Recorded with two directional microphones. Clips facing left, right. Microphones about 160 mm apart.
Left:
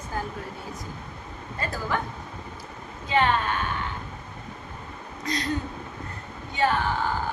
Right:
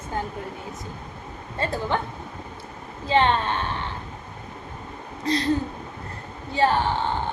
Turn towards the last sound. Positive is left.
turn(degrees=-30)  # may be behind; listen again after turning